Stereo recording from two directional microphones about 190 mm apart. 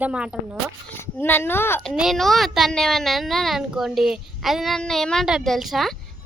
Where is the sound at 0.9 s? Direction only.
10° left (ahead or behind).